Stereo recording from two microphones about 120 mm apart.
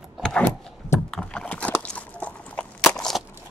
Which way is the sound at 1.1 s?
10° left (ahead or behind).